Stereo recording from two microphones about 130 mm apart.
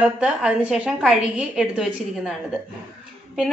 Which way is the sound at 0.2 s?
10° right (ahead or behind).